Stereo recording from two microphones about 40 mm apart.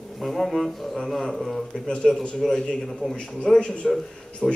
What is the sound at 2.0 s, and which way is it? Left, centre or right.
A man's voice, centre.